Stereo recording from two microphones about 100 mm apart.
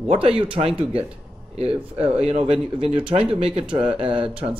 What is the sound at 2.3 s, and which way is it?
Speech, 75° right (ahead or behind).